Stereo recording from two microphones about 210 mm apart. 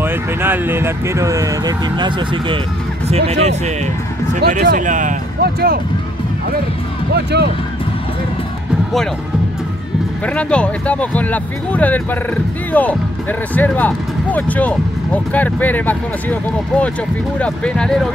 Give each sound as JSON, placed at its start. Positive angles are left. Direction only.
{"t": 0.0, "sound": "speech", "side_deg": -10}
{"t": 7.3, "sound": "speech", "side_deg": -55}
{"t": 10.2, "sound": "speech", "side_deg": 5}